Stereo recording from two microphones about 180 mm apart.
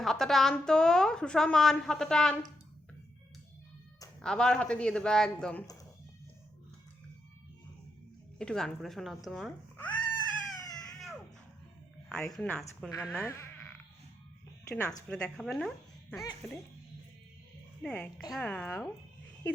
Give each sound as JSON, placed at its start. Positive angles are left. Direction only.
{"t": 0.0, "sound": "a woman's voice", "side_deg": 0}
{"t": 4.2, "sound": "a woman's voice", "side_deg": 5}
{"t": 8.4, "sound": "a woman's voice", "side_deg": 5}
{"t": 12.0, "sound": "a woman's voice", "side_deg": 5}
{"t": 12.9, "sound": "speech", "side_deg": 20}
{"t": 13.1, "sound": "frog", "side_deg": 15}
{"t": 14.7, "sound": "speech", "side_deg": 15}
{"t": 17.8, "sound": "a woman's voice", "side_deg": 5}